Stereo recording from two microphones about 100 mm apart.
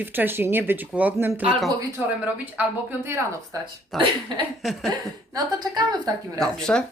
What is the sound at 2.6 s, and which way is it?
Speech, 15° right (ahead or behind).